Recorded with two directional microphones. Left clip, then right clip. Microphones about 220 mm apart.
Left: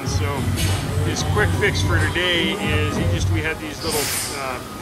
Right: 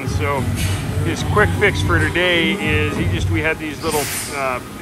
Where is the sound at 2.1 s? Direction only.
50° left (ahead or behind).